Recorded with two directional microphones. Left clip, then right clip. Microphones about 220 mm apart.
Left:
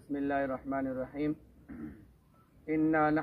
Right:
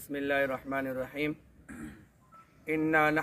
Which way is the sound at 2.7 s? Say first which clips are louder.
Right 2 dB; 25° right (ahead or behind).